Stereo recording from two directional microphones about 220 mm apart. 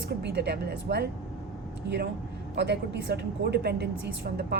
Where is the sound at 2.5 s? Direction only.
50° right (ahead or behind).